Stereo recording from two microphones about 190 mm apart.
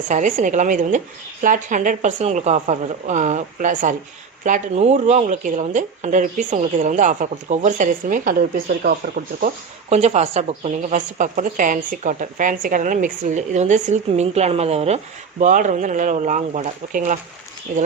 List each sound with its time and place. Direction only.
0.1 s a woman's voice: 40° right (ahead or behind)
9.9 s a woman's voice: 35° right (ahead or behind)